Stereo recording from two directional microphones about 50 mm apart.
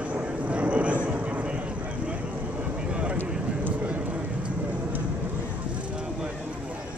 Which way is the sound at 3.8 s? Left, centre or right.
Right.